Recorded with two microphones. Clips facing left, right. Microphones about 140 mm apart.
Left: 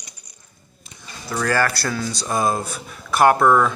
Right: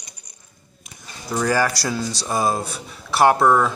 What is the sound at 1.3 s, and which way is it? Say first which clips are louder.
Speech: right 1 dB; 10° right (ahead or behind).